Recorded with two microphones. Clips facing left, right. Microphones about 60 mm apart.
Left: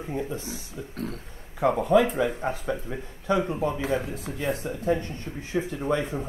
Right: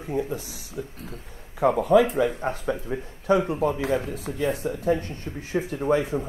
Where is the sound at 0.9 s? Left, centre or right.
Left.